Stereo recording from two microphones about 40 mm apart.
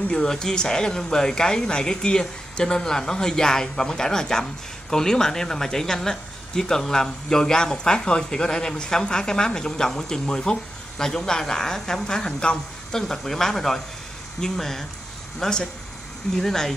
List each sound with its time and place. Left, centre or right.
0.1 s speech: centre
13.1 s speech: centre